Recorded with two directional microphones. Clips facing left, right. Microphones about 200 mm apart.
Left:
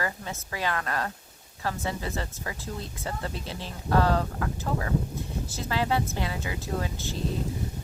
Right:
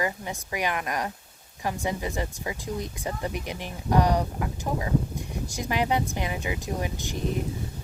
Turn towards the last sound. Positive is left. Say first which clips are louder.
# right 2 dB
turn(degrees=-15)  # may be behind; listen again after turning